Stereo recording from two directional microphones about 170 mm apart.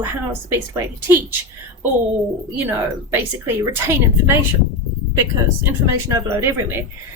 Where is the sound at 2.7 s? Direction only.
10° right (ahead or behind).